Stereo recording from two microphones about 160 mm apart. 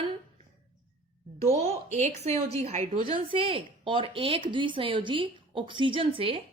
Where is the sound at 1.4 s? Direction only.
40° right (ahead or behind).